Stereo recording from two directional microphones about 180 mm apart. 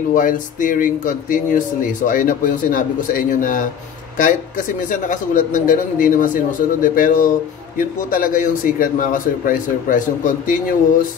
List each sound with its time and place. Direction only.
0.1 s speech: 50° left (ahead or behind)